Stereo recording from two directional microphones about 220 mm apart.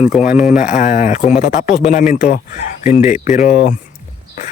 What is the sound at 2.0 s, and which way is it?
Speech, 45° left (ahead or behind).